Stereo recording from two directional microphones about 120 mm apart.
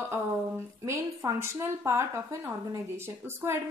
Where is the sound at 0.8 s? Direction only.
25° right (ahead or behind).